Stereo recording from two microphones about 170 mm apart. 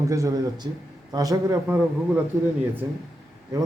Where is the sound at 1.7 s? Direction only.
5° right (ahead or behind).